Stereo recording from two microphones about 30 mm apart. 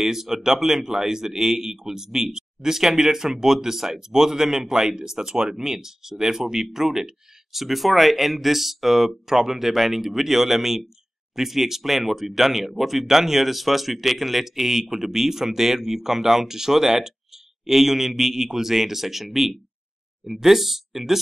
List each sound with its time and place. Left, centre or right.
0.0 s speech: centre